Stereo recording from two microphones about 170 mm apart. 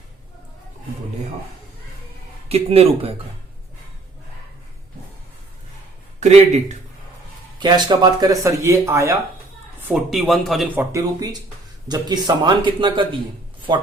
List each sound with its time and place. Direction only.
2.5 s speech: 35° right (ahead or behind)
6.1 s speech: 40° right (ahead or behind)
7.6 s speech: 25° right (ahead or behind)
9.9 s speech: centre (ahead or behind)
10.8 s speech: 20° right (ahead or behind)